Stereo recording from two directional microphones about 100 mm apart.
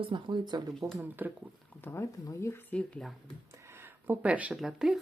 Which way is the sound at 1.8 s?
25° left (ahead or behind).